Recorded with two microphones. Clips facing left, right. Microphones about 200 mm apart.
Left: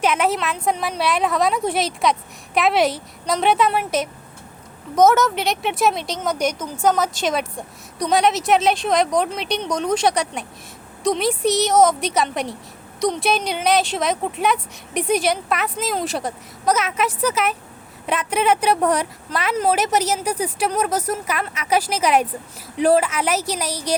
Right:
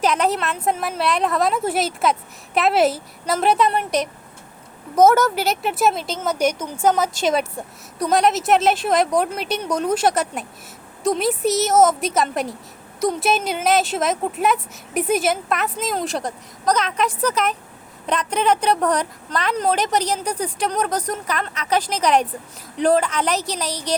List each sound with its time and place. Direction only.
0.0 s speech: centre (ahead or behind)
4.9 s a woman's voice: 10° right (ahead or behind); by 23.9 s 10° left (ahead or behind)